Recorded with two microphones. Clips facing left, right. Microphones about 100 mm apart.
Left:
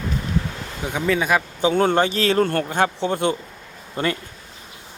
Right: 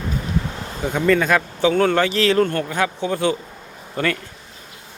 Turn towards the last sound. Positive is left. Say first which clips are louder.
# right 1 dB
turn(degrees=25)  # may be behind; listen again after turning